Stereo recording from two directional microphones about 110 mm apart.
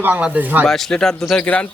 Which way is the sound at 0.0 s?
15° right (ahead or behind).